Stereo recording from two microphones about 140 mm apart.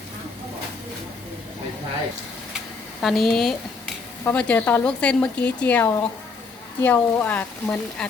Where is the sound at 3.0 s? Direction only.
Centre (ahead or behind).